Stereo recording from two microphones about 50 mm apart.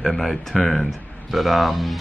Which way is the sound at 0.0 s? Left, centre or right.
Centre.